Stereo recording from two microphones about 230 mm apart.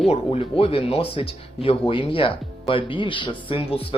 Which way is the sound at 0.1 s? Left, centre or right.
Left.